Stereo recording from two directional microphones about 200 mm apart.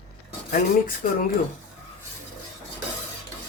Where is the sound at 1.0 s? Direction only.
45° left (ahead or behind).